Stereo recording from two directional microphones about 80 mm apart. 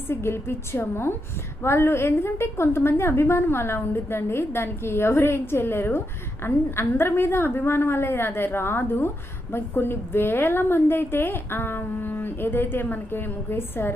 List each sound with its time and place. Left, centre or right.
0.1 s a woman's voice: left